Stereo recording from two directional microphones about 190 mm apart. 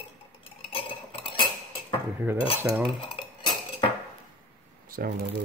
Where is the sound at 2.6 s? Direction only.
10° right (ahead or behind).